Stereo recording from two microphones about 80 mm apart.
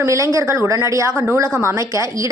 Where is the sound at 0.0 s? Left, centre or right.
Right.